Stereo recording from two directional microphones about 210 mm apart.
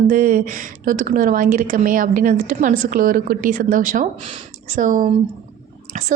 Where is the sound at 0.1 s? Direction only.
40° right (ahead or behind).